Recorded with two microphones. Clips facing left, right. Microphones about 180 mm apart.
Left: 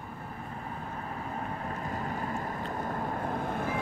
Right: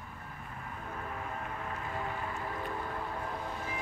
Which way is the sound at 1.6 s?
40° left (ahead or behind).